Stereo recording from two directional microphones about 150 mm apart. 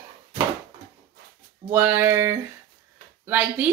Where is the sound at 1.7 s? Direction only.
15° right (ahead or behind).